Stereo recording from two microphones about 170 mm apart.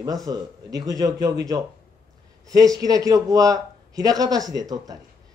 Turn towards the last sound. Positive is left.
turn(degrees=-20)  # may be behind; listen again after turning